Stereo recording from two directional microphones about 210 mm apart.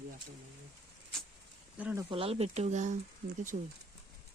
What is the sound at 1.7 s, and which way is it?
Speech, 10° right (ahead or behind).